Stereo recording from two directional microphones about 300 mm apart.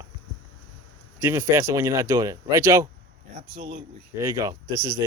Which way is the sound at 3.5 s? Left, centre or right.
Right.